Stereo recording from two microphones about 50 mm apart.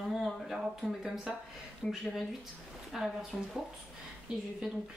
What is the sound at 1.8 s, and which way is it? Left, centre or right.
Speech, centre.